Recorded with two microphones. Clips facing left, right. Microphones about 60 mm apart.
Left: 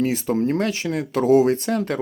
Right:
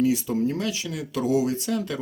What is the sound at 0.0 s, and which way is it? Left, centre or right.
Speech, left.